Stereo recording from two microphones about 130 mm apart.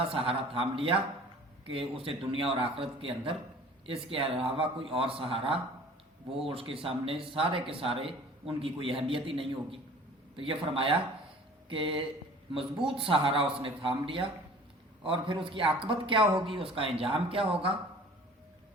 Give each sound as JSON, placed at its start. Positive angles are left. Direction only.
{"t": 0.1, "sound": "a man's voice", "side_deg": -45}